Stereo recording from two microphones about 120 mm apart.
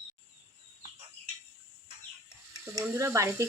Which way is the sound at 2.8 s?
20° right (ahead or behind).